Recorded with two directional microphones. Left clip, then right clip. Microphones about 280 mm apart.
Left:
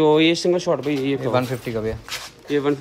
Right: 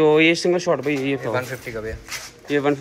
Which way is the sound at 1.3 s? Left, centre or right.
Left.